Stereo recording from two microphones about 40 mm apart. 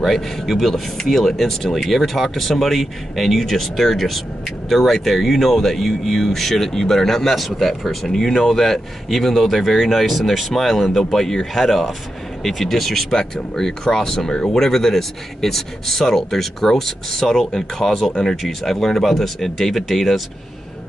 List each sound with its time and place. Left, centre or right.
0.0 s a man's voice: centre